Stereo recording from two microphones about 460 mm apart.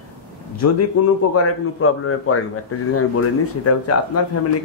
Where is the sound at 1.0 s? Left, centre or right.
Left.